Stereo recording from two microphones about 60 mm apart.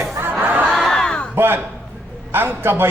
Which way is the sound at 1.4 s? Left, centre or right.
Right.